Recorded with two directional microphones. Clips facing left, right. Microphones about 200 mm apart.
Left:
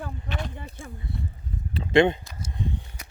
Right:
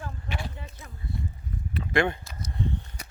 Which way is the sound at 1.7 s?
25° left (ahead or behind).